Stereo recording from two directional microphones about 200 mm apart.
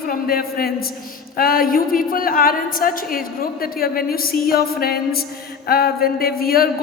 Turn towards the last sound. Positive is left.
turn(degrees=50)  # may be behind; listen again after turning